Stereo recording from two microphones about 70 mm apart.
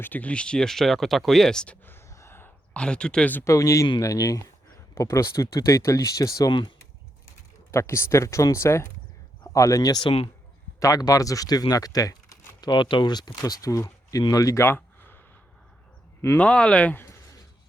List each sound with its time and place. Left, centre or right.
0.0 s speech: left
1.8 s a sound: left
2.7 s speech: centre
3.4 s speech: left
6.5 s speech: left
7.7 s speech: left
9.5 s speech: left
12.5 s speech: left
14.8 s a sound: left
16.4 s speech: centre
16.9 s a sound: left